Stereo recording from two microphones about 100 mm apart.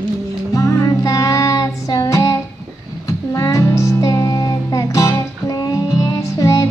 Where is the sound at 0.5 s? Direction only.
35° left (ahead or behind).